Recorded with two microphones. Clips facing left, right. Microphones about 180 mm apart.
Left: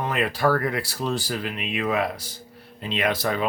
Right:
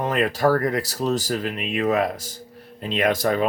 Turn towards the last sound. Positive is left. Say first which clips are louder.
# right 4 dB
turn(degrees=-45)  # may be behind; listen again after turning